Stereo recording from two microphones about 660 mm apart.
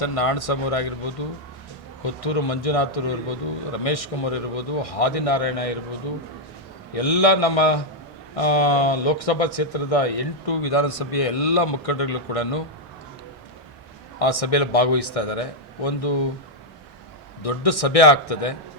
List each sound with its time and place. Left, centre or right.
0.0 s a man's voice: left
2.2 s speech: left
6.9 s speech: left
14.2 s speech: left
17.4 s speech: left